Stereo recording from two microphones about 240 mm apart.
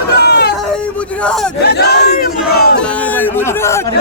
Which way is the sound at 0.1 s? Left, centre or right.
Left.